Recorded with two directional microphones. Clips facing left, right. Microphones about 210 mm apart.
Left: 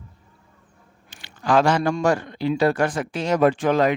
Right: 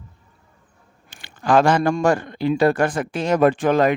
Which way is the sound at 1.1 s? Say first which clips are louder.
Right 2 dB; 50° right (ahead or behind).